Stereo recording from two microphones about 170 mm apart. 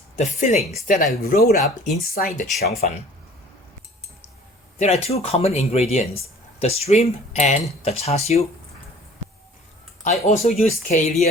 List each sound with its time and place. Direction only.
0.2 s speech: 40° left (ahead or behind)
1.1 s speech: 65° left (ahead or behind)
1.8 s speech: 55° left (ahead or behind)
4.8 s speech: 40° left (ahead or behind)
10.0 s speech: 40° left (ahead or behind)